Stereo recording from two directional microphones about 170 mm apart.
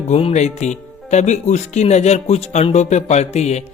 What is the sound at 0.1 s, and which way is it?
Speech, 35° left (ahead or behind).